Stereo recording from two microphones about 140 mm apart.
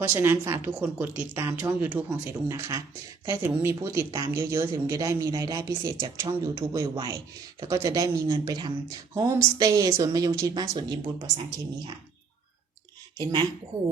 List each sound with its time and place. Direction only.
0.1 s speech: 15° right (ahead or behind); by 11.3 s 30° right (ahead or behind)